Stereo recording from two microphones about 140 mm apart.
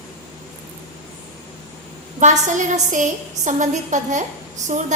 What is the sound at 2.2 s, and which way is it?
A woman's voice, 60° right (ahead or behind).